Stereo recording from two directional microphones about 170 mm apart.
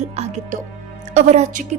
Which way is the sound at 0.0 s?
40° right (ahead or behind).